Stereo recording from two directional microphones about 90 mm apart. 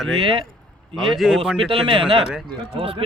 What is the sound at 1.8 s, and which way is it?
Speech, 80° right.